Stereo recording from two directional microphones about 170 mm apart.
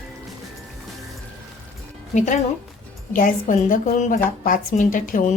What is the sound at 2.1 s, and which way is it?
A woman's voice, 45° left (ahead or behind).